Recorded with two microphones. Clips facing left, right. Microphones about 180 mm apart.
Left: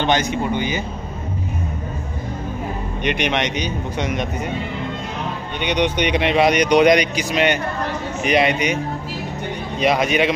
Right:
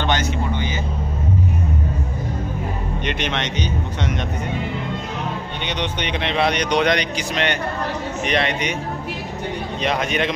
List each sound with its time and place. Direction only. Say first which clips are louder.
0.0 s speech: left 3 dB; 15° left (ahead or behind)
3.1 s speech: left 6 dB; 15° left (ahead or behind)
5.6 s speech: left 9 dB; 15° left (ahead or behind)
9.8 s speech: left 5 dB; 10° left (ahead or behind)